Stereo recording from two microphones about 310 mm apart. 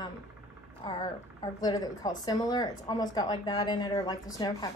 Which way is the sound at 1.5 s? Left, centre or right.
Centre.